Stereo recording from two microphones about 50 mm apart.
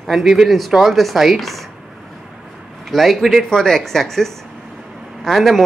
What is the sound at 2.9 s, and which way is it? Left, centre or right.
Speech, centre.